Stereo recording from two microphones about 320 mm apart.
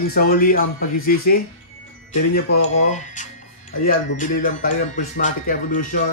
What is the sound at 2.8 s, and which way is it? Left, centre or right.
Speech, left.